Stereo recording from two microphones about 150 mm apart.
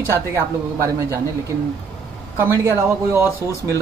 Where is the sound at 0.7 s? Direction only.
20° right (ahead or behind).